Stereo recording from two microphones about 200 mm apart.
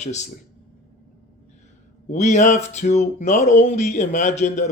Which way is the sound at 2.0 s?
35° left (ahead or behind).